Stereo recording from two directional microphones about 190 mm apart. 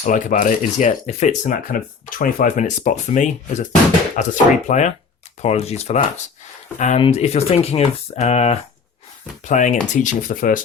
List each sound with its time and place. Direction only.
0.0 s speech: 45° left (ahead or behind)